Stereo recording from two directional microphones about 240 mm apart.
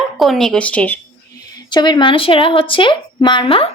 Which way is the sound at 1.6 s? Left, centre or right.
Centre.